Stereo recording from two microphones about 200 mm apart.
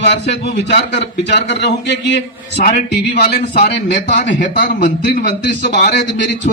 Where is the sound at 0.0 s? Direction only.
55° left (ahead or behind).